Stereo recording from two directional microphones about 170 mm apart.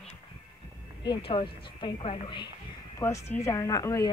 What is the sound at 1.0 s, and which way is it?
A woman's voice, 30° left (ahead or behind).